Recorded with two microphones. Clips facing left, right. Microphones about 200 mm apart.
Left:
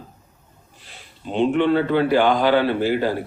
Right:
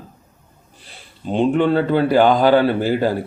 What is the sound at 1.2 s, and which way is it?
A man's voice, 40° right (ahead or behind).